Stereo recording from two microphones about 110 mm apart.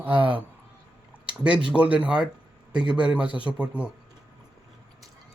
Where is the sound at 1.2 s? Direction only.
10° right (ahead or behind).